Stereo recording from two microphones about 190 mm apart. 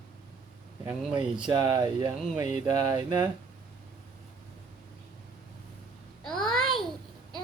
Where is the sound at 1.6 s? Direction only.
20° right (ahead or behind).